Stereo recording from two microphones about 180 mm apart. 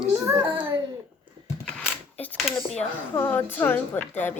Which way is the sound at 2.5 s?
5° left (ahead or behind).